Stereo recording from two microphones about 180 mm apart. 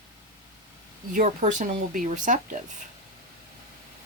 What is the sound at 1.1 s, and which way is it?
Speech, 45° right (ahead or behind).